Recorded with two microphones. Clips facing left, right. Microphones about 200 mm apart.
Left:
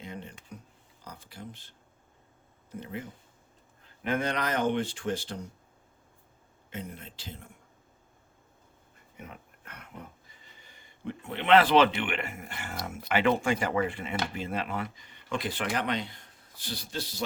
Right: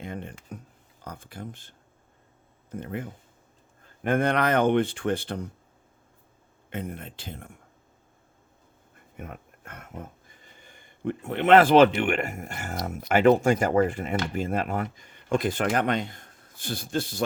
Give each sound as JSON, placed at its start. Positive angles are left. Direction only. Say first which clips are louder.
{"t": 0.0, "sound": "speech", "louder": "right 5 dB", "side_deg": -55}
{"t": 6.7, "sound": "speech", "louder": "right 6 dB", "side_deg": -55}
{"t": 9.1, "sound": "speech", "louder": "right 5 dB", "side_deg": -50}